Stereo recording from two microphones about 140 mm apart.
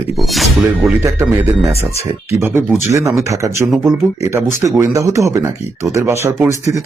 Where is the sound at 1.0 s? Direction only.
20° right (ahead or behind).